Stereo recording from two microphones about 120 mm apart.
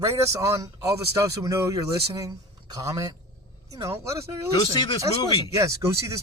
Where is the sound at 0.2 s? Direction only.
25° right (ahead or behind).